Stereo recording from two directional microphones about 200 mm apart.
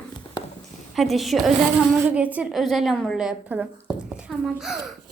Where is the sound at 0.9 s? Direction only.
Centre (ahead or behind).